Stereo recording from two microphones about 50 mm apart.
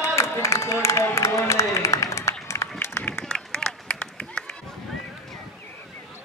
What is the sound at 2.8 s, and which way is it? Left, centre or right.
Run, left.